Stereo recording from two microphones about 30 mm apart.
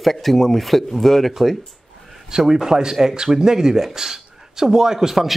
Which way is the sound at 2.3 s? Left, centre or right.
Right.